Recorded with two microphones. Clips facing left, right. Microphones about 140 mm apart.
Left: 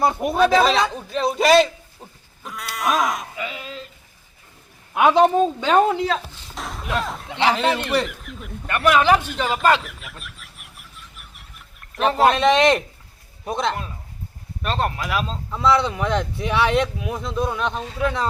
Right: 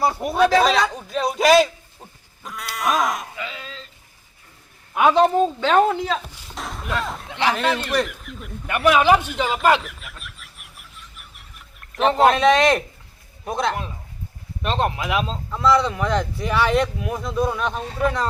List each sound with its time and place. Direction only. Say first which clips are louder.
0.0 s speech: left 2 dB; 20° left (ahead or behind)
0.6 s speech: even; centre (ahead or behind)
2.4 s sheep: even; centre (ahead or behind)
3.3 s a sound: left 2 dB; 15° left (ahead or behind)
4.9 s speech: even; 5° left (ahead or behind)
5.2 s speech: left 1 dB; 15° left (ahead or behind)
6.1 s a sound: left 1 dB; centre (ahead or behind)
7.0 s speech: left 2 dB; centre (ahead or behind)
8.6 s a man's voice: right 1 dB; 15° right (ahead or behind)
9.8 s a sound: even; centre (ahead or behind)
12.2 s a man's voice: even; centre (ahead or behind)
14.6 s speech: right 1 dB; 20° right (ahead or behind)
15.5 s speech: right 1 dB; centre (ahead or behind)